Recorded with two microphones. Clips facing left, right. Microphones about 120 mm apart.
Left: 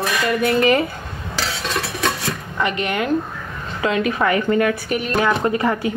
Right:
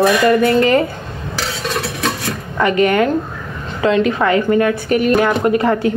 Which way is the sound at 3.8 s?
30° right (ahead or behind).